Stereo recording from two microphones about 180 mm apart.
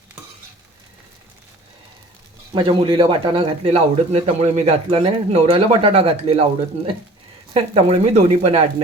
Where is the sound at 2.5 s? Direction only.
30° right (ahead or behind).